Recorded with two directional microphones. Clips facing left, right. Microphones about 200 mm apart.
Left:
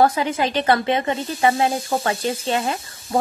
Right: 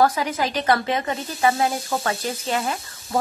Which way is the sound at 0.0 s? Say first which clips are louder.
Left 2 dB; 25° left (ahead or behind).